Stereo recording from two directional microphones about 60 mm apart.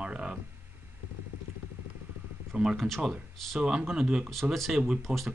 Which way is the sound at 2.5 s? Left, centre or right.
Centre.